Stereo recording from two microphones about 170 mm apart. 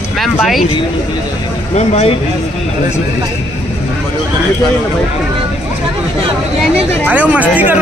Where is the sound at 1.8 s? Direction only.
40° left (ahead or behind).